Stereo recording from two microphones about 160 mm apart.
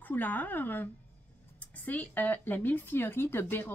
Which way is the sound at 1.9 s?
10° left (ahead or behind).